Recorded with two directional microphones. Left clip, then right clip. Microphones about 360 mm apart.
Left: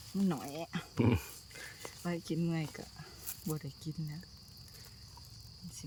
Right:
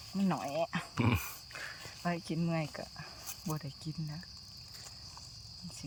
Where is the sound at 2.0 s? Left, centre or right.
Centre.